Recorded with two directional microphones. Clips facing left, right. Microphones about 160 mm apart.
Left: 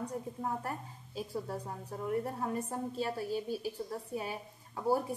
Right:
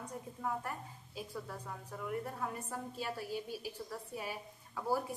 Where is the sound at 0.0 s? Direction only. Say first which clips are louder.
Left 4 dB; 35° left (ahead or behind).